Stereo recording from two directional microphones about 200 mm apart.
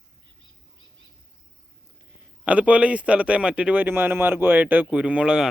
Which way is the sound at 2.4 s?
5° right (ahead or behind).